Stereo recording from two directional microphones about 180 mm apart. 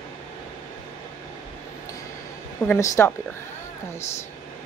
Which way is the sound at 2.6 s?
15° left (ahead or behind).